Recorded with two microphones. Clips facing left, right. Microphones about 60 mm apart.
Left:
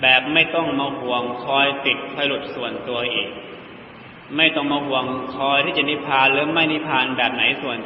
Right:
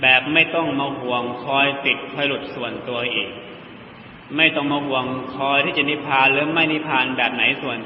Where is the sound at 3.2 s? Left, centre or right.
Centre.